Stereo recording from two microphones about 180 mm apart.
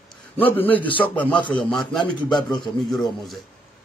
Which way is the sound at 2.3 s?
25° left (ahead or behind).